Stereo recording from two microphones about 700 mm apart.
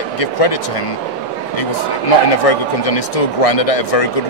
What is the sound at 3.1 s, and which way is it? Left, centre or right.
Speech, left.